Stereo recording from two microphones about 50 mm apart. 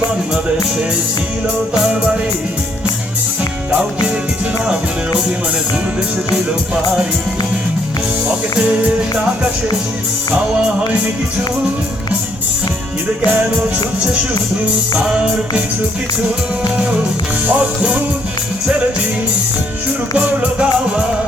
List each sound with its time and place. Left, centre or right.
3.7 s music: centre
8.3 s music: right
14.9 s music: right
16.7 s music: right
20.1 s music: right